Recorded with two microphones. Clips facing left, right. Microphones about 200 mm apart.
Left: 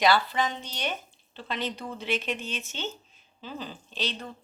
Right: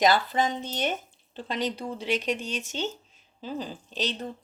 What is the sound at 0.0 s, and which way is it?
Speech, 45° right (ahead or behind).